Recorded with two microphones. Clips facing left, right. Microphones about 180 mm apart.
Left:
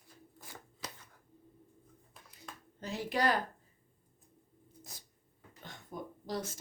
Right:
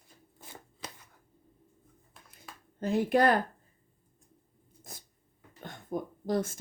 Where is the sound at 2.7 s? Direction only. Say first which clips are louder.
Right 9 dB; 50° right (ahead or behind).